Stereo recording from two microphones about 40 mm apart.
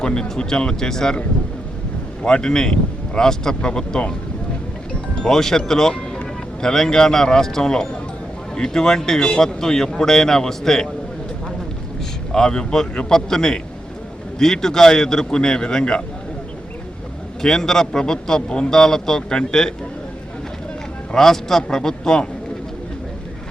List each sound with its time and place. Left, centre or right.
0.0 s speech: left
2.2 s a man's voice: centre
5.1 s a man's voice: centre
12.3 s a man's voice: centre
17.4 s a man's voice: centre
21.2 s a man's voice: centre